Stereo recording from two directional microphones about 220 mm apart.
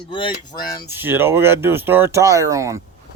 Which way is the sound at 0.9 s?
10° right (ahead or behind).